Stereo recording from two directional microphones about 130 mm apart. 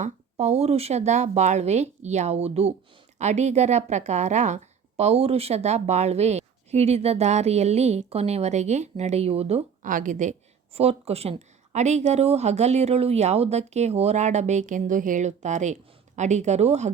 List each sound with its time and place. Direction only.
0.0 s a woman's voice: 60° right (ahead or behind)
9.8 s a woman's voice: 85° right
10.8 s a woman's voice: 50° right (ahead or behind)